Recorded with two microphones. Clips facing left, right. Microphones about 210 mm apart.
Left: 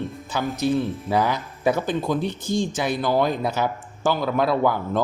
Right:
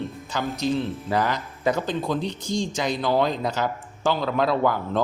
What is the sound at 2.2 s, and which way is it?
Speech, 55° left (ahead or behind).